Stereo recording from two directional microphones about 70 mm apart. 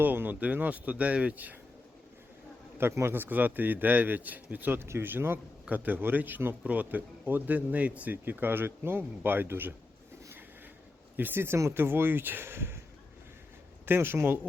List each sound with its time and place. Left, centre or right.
0.0 s speech: right
2.7 s speech: right
11.2 s speech: right
13.8 s speech: right